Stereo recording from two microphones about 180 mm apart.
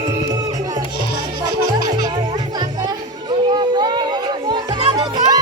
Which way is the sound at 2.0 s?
20° right (ahead or behind).